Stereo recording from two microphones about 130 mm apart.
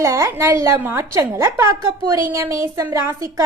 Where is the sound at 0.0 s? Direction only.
25° right (ahead or behind).